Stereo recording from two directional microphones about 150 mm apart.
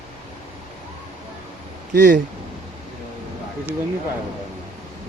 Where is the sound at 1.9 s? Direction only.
70° right (ahead or behind).